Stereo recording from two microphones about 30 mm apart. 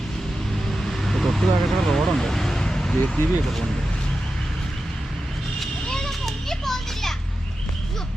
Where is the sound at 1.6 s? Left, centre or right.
Centre.